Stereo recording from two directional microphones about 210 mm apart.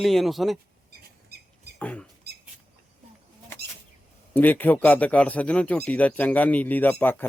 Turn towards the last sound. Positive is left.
turn(degrees=10)  # may be behind; listen again after turning